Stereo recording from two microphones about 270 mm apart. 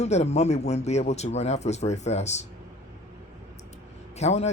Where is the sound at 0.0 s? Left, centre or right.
Left.